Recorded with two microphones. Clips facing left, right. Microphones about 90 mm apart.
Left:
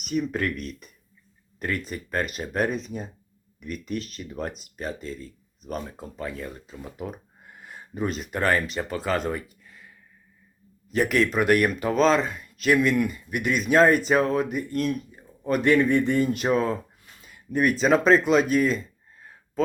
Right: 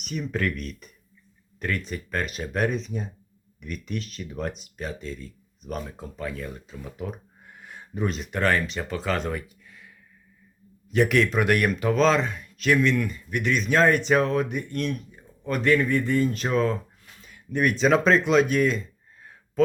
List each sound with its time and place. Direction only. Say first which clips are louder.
0.0 s speech: left 2 dB; 5° left (ahead or behind)
15.7 s speech: left 1 dB; 20° left (ahead or behind); by 18.8 s centre (ahead or behind)
19.2 s a sound: right 4 dB; centre (ahead or behind)